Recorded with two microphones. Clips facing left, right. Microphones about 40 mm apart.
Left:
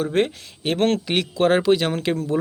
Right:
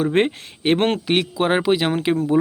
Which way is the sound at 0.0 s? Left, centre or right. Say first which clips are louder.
Right 3 dB; right.